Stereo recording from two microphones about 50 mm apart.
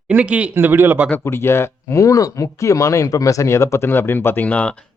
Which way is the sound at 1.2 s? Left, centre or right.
Left.